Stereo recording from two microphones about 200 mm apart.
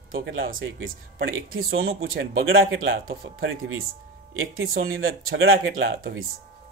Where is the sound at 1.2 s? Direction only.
90° right.